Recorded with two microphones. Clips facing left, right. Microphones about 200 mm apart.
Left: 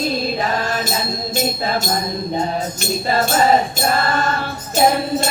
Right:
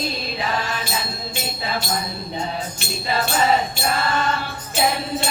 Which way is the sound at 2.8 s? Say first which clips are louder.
Left 5 dB; 45° left (ahead or behind).